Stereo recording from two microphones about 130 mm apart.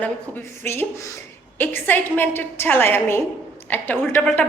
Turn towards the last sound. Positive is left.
turn(degrees=15)  # may be behind; listen again after turning